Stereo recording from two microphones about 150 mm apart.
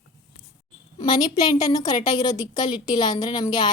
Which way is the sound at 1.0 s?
30° left (ahead or behind).